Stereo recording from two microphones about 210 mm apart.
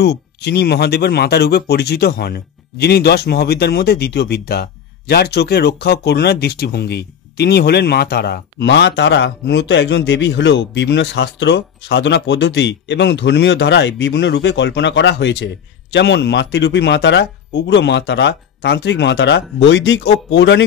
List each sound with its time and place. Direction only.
0.0 s speech: 50° left (ahead or behind)